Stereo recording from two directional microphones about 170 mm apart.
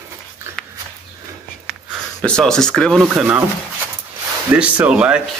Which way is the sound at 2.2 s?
5° left (ahead or behind).